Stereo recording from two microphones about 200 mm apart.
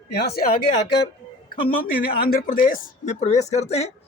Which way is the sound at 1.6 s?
45° left (ahead or behind).